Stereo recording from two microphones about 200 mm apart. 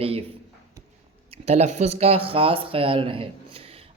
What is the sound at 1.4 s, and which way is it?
Speech, 35° right (ahead or behind).